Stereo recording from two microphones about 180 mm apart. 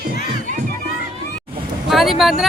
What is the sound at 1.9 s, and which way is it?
Vehicle, centre (ahead or behind).